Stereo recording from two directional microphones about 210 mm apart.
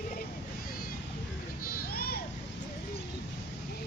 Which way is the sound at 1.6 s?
45° left (ahead or behind).